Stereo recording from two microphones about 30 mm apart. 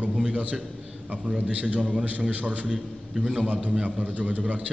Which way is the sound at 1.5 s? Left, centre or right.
Right.